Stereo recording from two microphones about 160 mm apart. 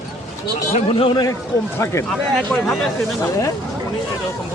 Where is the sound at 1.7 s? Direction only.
15° left (ahead or behind).